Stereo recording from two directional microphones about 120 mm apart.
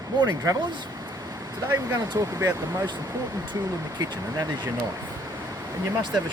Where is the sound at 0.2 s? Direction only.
35° right (ahead or behind).